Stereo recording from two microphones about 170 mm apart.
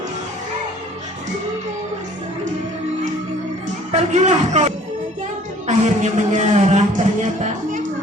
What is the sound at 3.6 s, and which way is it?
Music, 45° right (ahead or behind).